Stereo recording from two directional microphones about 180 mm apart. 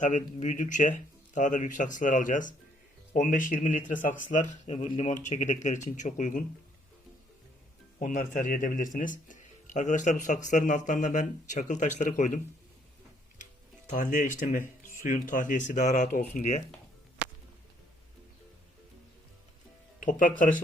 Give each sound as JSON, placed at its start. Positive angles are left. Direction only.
{"t": 0.0, "sound": "a man's voice", "side_deg": 40}
{"t": 7.9, "sound": "a man's voice", "side_deg": 50}
{"t": 13.4, "sound": "a man's voice", "side_deg": 45}
{"t": 20.0, "sound": "a man's voice", "side_deg": 45}